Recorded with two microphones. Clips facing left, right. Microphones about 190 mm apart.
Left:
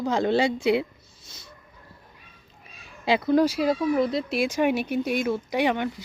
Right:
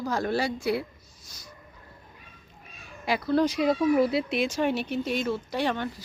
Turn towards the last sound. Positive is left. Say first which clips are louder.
# left 4 dB
turn(degrees=15)  # may be behind; listen again after turning